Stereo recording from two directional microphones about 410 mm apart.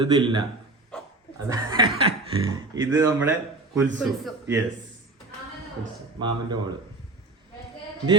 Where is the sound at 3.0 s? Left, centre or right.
Centre.